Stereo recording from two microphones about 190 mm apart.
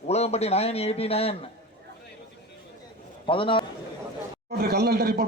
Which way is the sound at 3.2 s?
25° left (ahead or behind).